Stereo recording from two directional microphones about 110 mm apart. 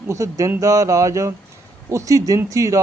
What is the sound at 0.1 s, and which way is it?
A man's voice, 30° right (ahead or behind).